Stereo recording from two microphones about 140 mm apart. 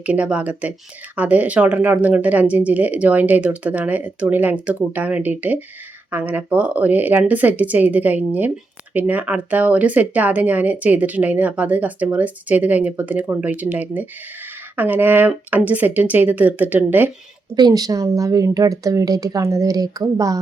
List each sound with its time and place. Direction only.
0.0 s speech: 10° right (ahead or behind)
17.5 s a woman's voice: 30° right (ahead or behind)